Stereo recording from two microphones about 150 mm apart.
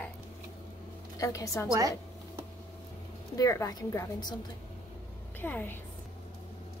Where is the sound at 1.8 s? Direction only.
25° right (ahead or behind).